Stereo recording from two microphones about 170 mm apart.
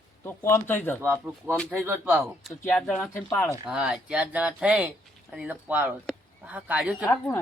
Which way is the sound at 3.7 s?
5° right (ahead or behind).